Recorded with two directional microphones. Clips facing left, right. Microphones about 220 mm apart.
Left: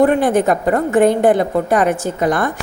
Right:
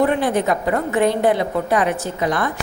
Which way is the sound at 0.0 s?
50° left (ahead or behind).